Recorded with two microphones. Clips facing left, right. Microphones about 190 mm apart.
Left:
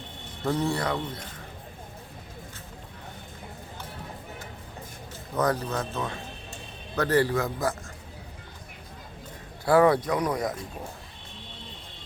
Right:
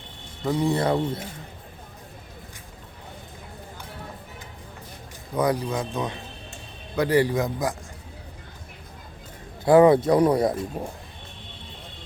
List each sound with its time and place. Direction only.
0.4 s a man's voice: 15° right (ahead or behind)
0.8 s speech: 25° right (ahead or behind)
5.3 s a man's voice: 10° right (ahead or behind)
9.6 s speech: 20° right (ahead or behind)
10.1 s speech: 30° right (ahead or behind)